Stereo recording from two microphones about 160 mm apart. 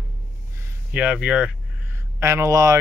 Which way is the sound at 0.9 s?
5° right (ahead or behind).